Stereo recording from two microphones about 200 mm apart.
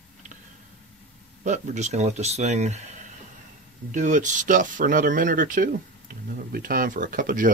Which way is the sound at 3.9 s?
40° right (ahead or behind).